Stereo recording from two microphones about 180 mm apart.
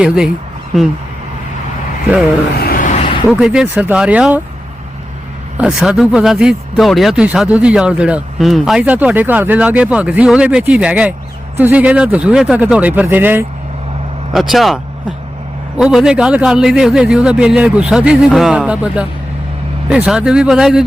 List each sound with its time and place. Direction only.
2.6 s vehicle: 55° left (ahead or behind); by 3.2 s 35° left (ahead or behind)
3.2 s speech: 5° right (ahead or behind)
5.5 s speech: 5° right (ahead or behind)
15.8 s speech: centre (ahead or behind)